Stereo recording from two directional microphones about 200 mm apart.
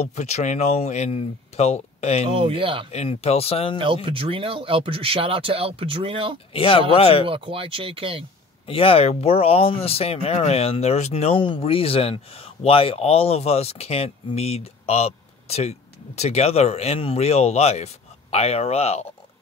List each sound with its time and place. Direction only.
0.0 s speech: 35° left (ahead or behind)
2.2 s speech: 25° right (ahead or behind)
2.9 s speech: 30° left (ahead or behind)
3.7 s speech: 25° right (ahead or behind)
6.5 s speech: 25° left (ahead or behind)
7.2 s speech: 25° right (ahead or behind)
8.6 s speech: 30° left (ahead or behind)